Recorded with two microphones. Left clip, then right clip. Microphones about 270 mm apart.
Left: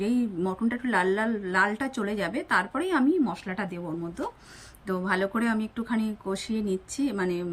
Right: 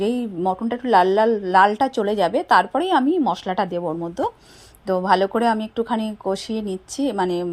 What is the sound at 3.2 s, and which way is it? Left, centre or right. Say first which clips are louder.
Speech: right 9 dB; right.